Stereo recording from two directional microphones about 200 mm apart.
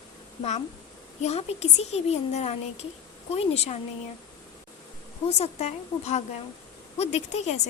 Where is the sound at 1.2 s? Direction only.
35° left (ahead or behind).